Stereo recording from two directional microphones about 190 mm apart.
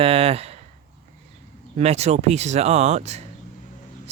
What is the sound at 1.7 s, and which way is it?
Speech, 35° right (ahead or behind).